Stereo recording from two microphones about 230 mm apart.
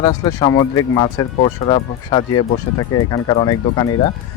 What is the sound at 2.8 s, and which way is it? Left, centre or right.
Speech, left.